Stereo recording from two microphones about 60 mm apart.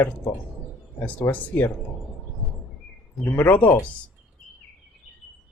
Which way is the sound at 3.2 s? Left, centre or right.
Left.